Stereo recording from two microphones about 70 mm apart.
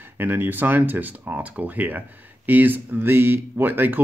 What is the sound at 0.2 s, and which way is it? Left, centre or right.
Speech, right.